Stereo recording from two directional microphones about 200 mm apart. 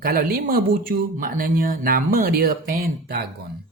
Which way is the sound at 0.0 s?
45° right (ahead or behind).